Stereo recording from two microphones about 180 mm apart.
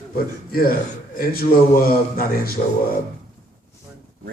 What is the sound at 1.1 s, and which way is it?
Speech, 55° left (ahead or behind).